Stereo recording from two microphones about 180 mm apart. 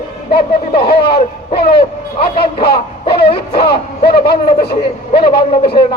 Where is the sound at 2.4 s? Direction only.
30° left (ahead or behind).